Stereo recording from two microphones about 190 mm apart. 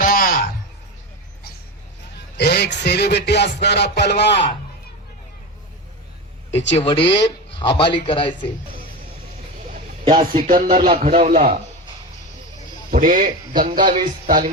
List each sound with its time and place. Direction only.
0.0 s a sound: 45° left (ahead or behind)
2.4 s music: 60° left (ahead or behind)
6.7 s speech: 30° left (ahead or behind)
7.0 s music: 65° left (ahead or behind)
7.6 s a man's voice: 25° left (ahead or behind)
10.4 s a man's voice: 45° right (ahead or behind)
10.8 s speech: 30° right (ahead or behind)
12.9 s a man's voice: 45° right (ahead or behind)